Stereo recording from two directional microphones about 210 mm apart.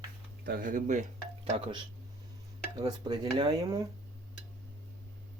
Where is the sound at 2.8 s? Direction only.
20° right (ahead or behind).